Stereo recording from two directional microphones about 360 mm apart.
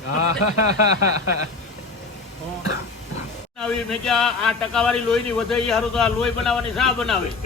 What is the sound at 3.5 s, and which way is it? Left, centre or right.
Speech, centre.